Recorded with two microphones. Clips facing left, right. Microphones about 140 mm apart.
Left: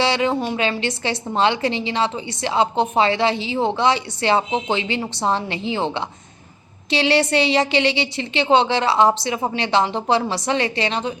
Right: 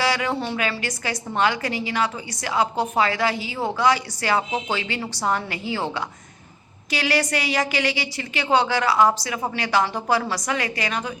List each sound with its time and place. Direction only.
0.0 s a woman's voice: 25° left (ahead or behind)